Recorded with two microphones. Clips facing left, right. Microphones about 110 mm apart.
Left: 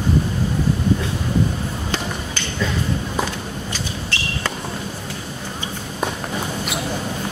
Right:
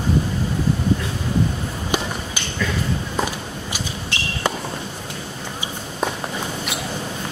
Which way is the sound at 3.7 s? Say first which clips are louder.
Left 1 dB; 15° right (ahead or behind).